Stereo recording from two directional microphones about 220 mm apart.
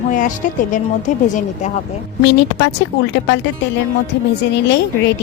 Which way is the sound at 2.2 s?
50° left (ahead or behind).